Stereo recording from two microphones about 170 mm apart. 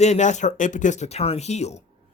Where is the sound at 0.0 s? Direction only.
45° left (ahead or behind).